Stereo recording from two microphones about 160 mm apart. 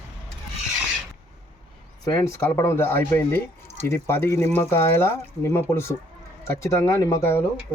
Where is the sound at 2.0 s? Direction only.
20° left (ahead or behind).